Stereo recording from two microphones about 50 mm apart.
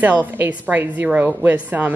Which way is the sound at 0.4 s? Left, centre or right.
Right.